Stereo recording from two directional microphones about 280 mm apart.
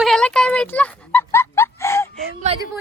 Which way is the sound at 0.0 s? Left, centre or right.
Centre.